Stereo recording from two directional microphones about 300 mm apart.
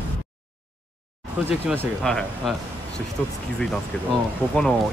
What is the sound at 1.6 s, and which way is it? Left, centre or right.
Speech, centre.